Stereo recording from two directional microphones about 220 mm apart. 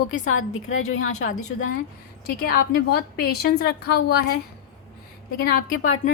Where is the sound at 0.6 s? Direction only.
65° left (ahead or behind).